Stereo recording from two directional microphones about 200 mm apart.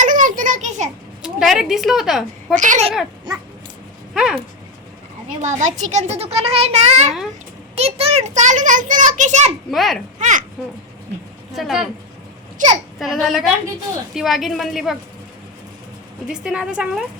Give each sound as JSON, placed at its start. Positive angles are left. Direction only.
{"t": 0.0, "sound": "a sound", "side_deg": -40}
{"t": 1.2, "sound": "speech", "side_deg": 0}
{"t": 2.6, "sound": "a child's voice", "side_deg": -35}
{"t": 3.3, "sound": "dog", "side_deg": -20}
{"t": 4.1, "sound": "a sound", "side_deg": -5}
{"t": 5.4, "sound": "a child's voice", "side_deg": -35}
{"t": 9.6, "sound": "a woman's voice", "side_deg": 0}
{"t": 10.2, "sound": "speech", "side_deg": -35}
{"t": 11.5, "sound": "a woman's voice", "side_deg": 0}
{"t": 12.6, "sound": "a child's voice", "side_deg": -40}
{"t": 13.0, "sound": "a woman's voice", "side_deg": 0}
{"t": 16.2, "sound": "a woman's voice", "side_deg": -5}